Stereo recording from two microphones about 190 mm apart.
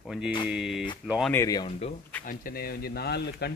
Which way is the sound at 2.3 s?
50° left (ahead or behind).